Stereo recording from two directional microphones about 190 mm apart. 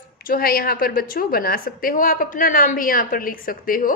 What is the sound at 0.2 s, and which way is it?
A woman's voice, 50° left (ahead or behind).